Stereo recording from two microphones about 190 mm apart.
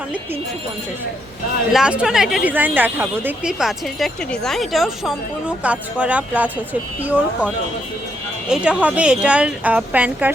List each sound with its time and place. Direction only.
1.7 s a woman's voice: 5° right (ahead or behind)